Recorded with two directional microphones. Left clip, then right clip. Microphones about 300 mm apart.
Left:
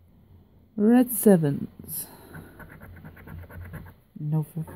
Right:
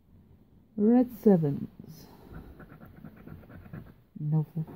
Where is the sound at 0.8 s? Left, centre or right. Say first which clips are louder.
Left 4 dB; centre.